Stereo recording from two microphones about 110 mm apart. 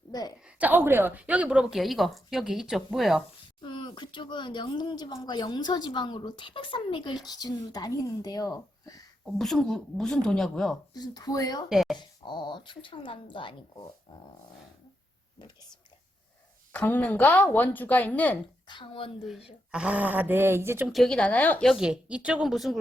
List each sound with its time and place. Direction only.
0.1 s a woman's voice: 35° left (ahead or behind)
0.4 s a woman's voice: 15° right (ahead or behind)
3.6 s speech: 45° left (ahead or behind)
9.2 s a woman's voice: 5° left (ahead or behind)
10.9 s speech: 35° left (ahead or behind)
11.7 s a woman's voice: 5° right (ahead or behind)
11.9 s speech: 45° left (ahead or behind)
16.7 s speech: 15° left (ahead or behind)
18.7 s speech: 50° left (ahead or behind)
19.7 s speech: 10° right (ahead or behind)
20.8 s speech: centre (ahead or behind)
21.8 s speech: 10° right (ahead or behind)